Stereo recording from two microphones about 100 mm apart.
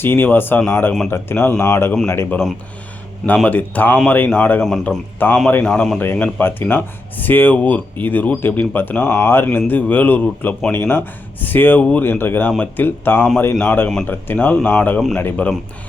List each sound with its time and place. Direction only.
0.0 s speech: 20° left (ahead or behind)
3.2 s a man's voice: 15° left (ahead or behind)
6.0 s speech: 15° left (ahead or behind)